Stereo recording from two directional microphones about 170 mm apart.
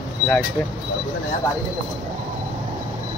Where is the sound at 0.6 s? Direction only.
5° left (ahead or behind).